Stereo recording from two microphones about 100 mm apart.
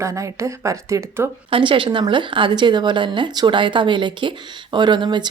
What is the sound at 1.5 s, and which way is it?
A woman's voice, 65° right (ahead or behind).